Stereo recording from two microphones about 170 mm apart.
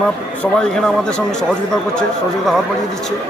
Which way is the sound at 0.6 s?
5° left (ahead or behind).